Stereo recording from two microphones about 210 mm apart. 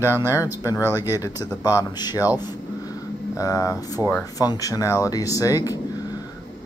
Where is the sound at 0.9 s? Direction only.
15° left (ahead or behind).